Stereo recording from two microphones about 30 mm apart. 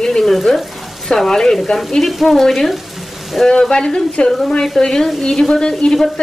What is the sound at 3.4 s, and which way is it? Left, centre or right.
Speech, left.